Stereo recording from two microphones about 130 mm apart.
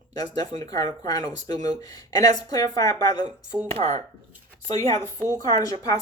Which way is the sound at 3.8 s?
55° right (ahead or behind).